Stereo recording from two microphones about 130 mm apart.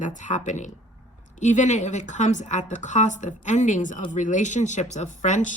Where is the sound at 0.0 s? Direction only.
70° left (ahead or behind).